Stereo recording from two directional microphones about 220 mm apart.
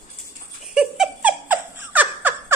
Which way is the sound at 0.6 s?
Centre (ahead or behind).